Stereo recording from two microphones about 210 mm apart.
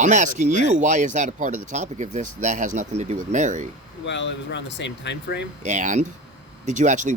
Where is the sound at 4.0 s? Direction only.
60° left (ahead or behind).